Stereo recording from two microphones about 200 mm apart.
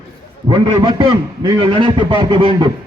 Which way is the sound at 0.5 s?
20° right (ahead or behind).